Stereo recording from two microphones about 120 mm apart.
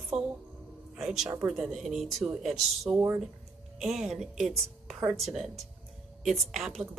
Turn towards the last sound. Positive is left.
turn(degrees=-5)  # may be behind; listen again after turning